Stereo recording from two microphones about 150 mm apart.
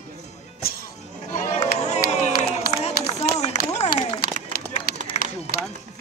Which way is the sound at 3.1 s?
45° left (ahead or behind).